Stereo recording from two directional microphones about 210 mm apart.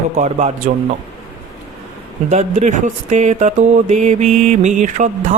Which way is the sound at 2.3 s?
30° right (ahead or behind).